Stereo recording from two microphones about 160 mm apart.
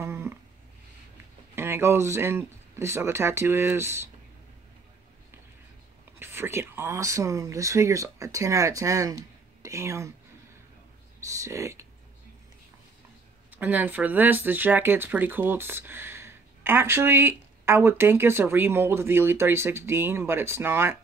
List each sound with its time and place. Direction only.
0.0 s a sound: 15° right (ahead or behind)
1.5 s speech: 15° right (ahead or behind)
6.1 s speech: 15° right (ahead or behind)
11.4 s speech: 20° right (ahead or behind)
13.5 s speech: 10° right (ahead or behind)